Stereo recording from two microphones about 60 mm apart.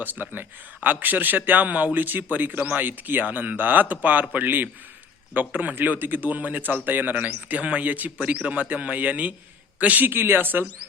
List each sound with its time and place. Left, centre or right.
0.0 s a man's voice: right
10.1 s speech: right